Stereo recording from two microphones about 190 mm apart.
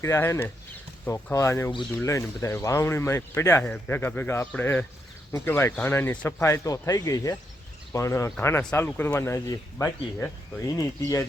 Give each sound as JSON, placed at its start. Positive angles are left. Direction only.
{"t": 0.0, "sound": "speech", "side_deg": 15}